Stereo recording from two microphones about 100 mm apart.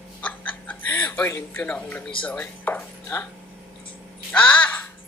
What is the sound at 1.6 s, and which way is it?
Speech, 15° left (ahead or behind).